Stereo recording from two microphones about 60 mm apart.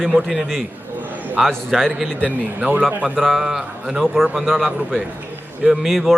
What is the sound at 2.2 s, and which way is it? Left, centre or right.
Speech, right.